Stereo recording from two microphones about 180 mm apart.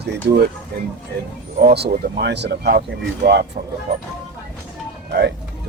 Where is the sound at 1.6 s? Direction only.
65° right (ahead or behind).